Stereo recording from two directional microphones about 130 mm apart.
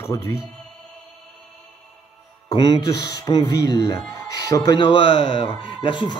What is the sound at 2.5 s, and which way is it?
Speech, 35° left (ahead or behind).